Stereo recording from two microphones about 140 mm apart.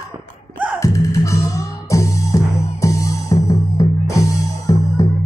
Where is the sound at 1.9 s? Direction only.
20° left (ahead or behind).